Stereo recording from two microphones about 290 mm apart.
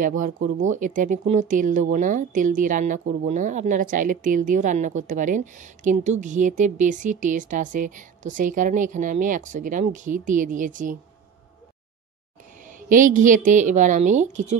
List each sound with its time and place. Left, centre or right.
0.0 s speech: right
12.7 s speech: right